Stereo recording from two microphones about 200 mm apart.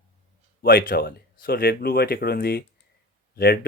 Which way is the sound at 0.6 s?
45° left (ahead or behind).